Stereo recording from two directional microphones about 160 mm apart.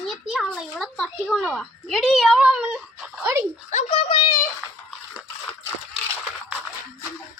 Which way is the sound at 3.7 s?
45° left (ahead or behind).